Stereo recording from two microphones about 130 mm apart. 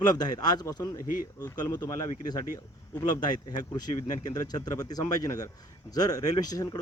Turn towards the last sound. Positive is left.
turn(degrees=30)  # may be behind; listen again after turning